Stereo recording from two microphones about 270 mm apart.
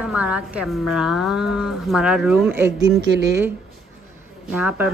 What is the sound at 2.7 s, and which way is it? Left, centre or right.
Speech, right.